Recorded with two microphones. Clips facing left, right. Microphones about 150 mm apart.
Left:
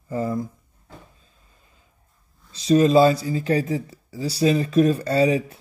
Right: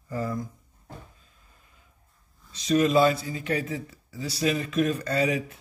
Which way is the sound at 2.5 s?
30° left (ahead or behind).